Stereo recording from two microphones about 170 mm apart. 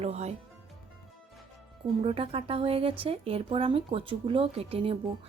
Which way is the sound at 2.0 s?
35° right (ahead or behind).